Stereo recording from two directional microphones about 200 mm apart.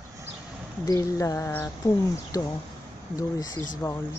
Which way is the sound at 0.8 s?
15° left (ahead or behind).